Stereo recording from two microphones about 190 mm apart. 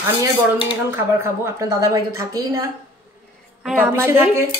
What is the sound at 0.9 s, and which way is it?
A woman's voice, 15° right (ahead or behind).